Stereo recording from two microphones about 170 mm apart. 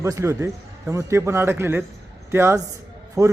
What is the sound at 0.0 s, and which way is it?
A man's voice, 15° right (ahead or behind).